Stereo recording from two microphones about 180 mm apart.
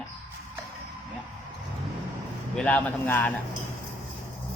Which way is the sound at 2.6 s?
10° left (ahead or behind).